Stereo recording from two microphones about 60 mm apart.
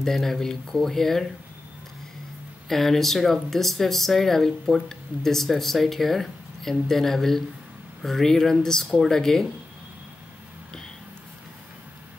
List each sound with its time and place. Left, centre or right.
0.0 s speech: centre
2.7 s speech: centre